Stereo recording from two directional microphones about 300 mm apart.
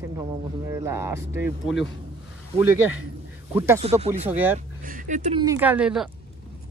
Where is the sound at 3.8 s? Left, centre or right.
Right.